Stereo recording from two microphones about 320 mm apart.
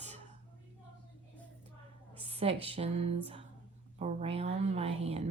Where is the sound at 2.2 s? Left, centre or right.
Centre.